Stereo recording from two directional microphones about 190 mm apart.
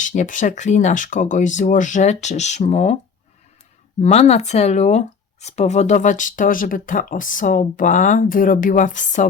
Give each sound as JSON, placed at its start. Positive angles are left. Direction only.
{"t": 0.0, "sound": "speech", "side_deg": 40}
{"t": 4.0, "sound": "speech", "side_deg": 35}